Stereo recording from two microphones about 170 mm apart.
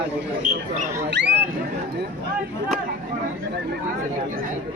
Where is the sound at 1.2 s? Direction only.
90° right.